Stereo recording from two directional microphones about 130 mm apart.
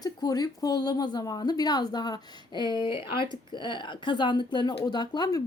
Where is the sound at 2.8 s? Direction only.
40° left (ahead or behind).